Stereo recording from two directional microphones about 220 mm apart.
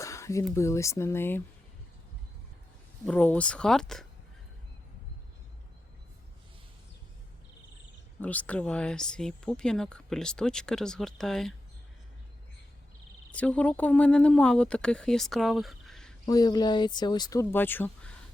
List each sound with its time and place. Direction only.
0.0 s a sound: 15° left (ahead or behind)
0.5 s speech: 15° left (ahead or behind)
3.1 s speech: 5° left (ahead or behind)
8.2 s speech: 5° left (ahead or behind)
13.3 s speech: 5° left (ahead or behind)
16.2 s speech: 15° left (ahead or behind)